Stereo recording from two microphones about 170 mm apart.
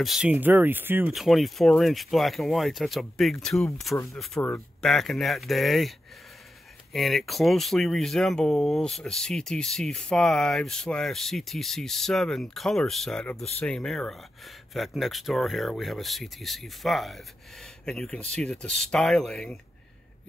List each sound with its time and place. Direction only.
0.0 s speech: 5° right (ahead or behind)
1.1 s speech: centre (ahead or behind)
3.9 s speech: 15° left (ahead or behind)
4.8 s speech: centre (ahead or behind)